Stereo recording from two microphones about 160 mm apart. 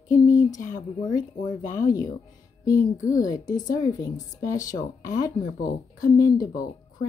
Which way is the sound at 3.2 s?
20° left (ahead or behind).